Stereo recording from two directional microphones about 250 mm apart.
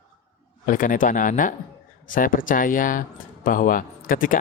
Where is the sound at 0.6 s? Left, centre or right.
Left.